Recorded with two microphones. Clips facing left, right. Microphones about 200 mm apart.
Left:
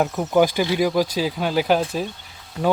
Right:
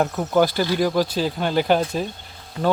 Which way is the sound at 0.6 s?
5° left (ahead or behind).